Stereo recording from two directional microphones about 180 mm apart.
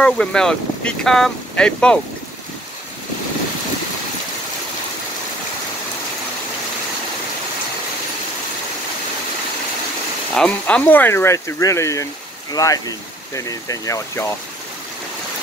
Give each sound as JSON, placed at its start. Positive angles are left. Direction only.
{"t": 0.0, "sound": "speech", "side_deg": 5}
{"t": 10.3, "sound": "speech", "side_deg": 5}